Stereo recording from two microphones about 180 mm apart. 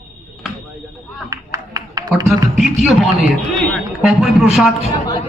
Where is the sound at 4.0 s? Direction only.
Centre (ahead or behind).